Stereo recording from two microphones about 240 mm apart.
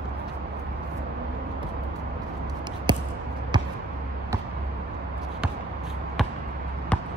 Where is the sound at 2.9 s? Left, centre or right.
Centre.